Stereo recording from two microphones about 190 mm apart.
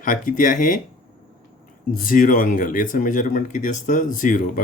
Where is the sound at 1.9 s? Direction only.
45° left (ahead or behind).